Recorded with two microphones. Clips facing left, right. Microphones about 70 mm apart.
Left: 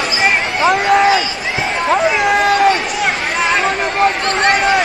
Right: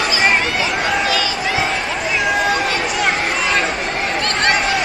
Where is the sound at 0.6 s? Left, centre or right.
Left.